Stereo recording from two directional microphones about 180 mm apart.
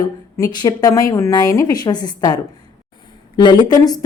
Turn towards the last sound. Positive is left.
turn(degrees=20)  # may be behind; listen again after turning